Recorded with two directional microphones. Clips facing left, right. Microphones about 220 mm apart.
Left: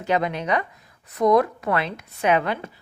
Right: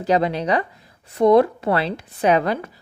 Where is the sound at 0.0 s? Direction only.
35° right (ahead or behind).